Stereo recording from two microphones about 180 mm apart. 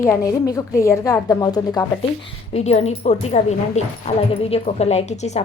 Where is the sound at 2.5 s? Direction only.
35° left (ahead or behind).